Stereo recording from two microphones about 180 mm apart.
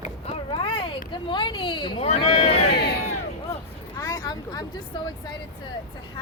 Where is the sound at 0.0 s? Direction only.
35° left (ahead or behind).